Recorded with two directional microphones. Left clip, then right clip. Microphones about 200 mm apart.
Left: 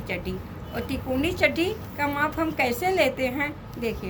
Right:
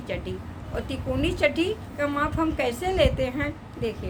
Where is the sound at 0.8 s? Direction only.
15° right (ahead or behind).